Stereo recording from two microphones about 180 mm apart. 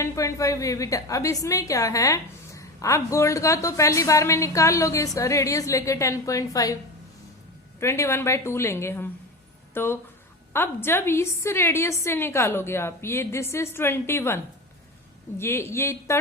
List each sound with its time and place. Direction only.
0.0 s a woman's voice: 15° left (ahead or behind)
7.8 s a woman's voice: 15° left (ahead or behind)